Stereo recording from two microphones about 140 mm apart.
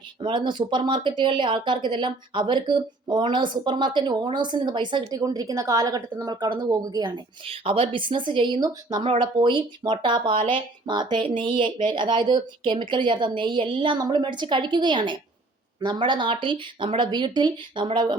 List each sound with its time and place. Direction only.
0.2 s speech: 35° right (ahead or behind)